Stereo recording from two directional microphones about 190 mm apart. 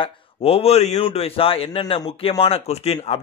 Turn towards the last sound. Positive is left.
turn(degrees=35)  # may be behind; listen again after turning